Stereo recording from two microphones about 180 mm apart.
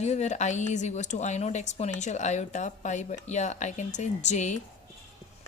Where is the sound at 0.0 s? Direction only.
40° left (ahead or behind).